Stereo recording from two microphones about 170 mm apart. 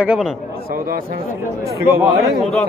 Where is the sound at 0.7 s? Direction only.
60° right (ahead or behind).